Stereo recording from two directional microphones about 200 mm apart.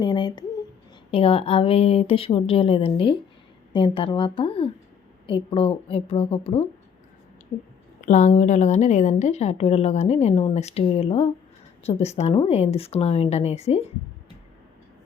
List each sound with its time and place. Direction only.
0.0 s a sound: 20° left (ahead or behind)
1.1 s speech: 25° left (ahead or behind)
8.0 s a woman's voice: 40° left (ahead or behind)